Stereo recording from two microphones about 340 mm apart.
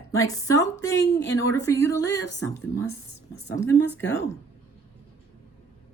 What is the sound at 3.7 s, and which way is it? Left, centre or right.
Speech, left.